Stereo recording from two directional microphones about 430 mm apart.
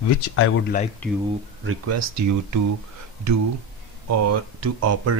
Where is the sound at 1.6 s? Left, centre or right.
Right.